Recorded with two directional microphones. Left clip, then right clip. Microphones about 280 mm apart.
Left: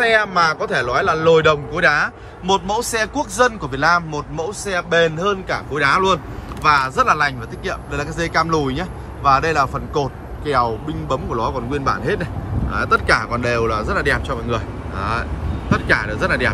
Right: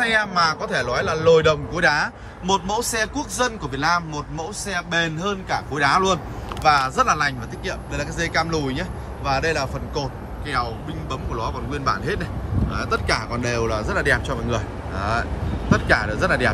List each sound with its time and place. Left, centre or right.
0.0 s a man's voice: centre